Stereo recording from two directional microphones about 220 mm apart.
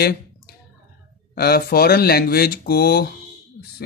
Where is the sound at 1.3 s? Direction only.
45° left (ahead or behind).